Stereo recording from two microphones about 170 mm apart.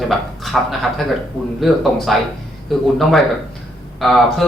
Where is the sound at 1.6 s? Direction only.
Centre (ahead or behind).